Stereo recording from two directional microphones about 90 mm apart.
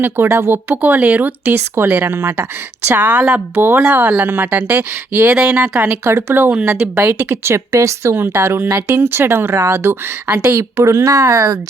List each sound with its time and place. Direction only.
0.0 s speech: 25° right (ahead or behind)
2.9 s a woman's voice: 20° right (ahead or behind)
6.1 s a woman's voice: 30° right (ahead or behind)